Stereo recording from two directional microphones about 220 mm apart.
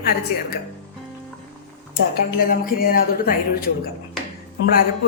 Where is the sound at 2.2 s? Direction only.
40° left (ahead or behind).